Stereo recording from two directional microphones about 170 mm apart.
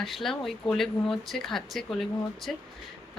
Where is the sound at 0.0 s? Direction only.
Centre (ahead or behind).